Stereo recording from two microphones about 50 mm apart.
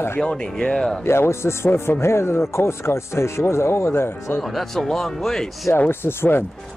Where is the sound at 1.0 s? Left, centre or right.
Left.